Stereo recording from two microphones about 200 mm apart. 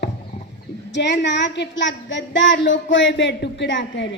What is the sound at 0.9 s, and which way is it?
Speech, 60° left (ahead or behind).